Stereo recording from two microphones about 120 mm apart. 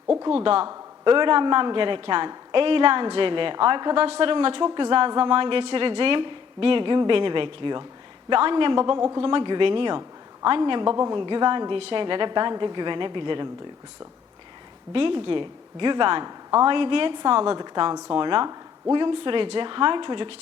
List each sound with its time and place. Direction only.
0.2 s a man's voice: 45° right (ahead or behind); by 9.2 s 30° right (ahead or behind)
9.2 s a man's voice: 45° right (ahead or behind)
14.9 s speech: 50° right (ahead or behind)